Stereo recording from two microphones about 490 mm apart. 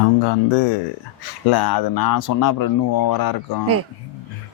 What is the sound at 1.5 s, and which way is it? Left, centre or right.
Speech, left.